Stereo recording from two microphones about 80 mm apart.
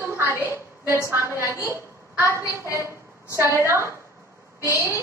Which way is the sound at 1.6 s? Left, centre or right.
Right.